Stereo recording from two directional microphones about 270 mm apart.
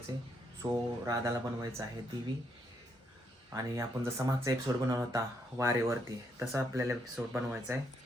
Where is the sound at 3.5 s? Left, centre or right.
Centre.